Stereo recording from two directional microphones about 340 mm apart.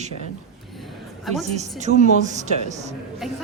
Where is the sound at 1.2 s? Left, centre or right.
Centre.